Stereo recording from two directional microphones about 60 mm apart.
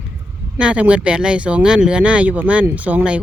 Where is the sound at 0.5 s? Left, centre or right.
Centre.